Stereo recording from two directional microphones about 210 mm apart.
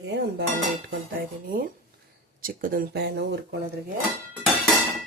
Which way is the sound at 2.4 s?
40° right (ahead or behind).